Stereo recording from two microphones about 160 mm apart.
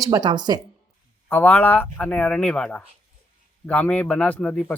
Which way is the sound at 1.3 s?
10° left (ahead or behind).